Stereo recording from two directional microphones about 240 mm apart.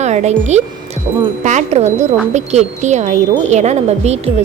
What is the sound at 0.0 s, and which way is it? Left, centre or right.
A woman's voice, right.